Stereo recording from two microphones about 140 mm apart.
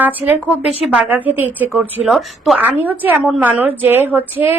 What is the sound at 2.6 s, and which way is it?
A woman's voice, 10° right (ahead or behind).